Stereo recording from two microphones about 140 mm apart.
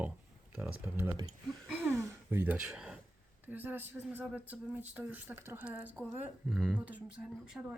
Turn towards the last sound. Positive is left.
turn(degrees=-5)  # may be behind; listen again after turning